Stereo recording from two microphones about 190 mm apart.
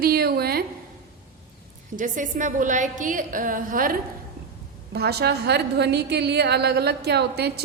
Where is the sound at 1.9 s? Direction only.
45° right (ahead or behind).